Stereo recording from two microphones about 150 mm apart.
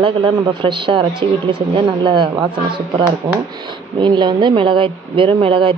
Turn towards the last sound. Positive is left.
turn(degrees=-35)  # may be behind; listen again after turning